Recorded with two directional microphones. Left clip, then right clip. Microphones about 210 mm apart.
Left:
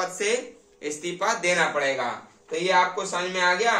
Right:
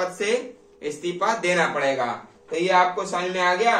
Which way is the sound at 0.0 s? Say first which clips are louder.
Right 2 dB; 15° left (ahead or behind).